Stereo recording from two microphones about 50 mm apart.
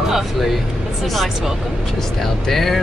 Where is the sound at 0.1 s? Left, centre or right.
Centre.